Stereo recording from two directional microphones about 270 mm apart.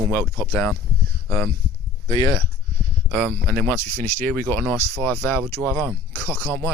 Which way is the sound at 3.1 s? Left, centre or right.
Centre.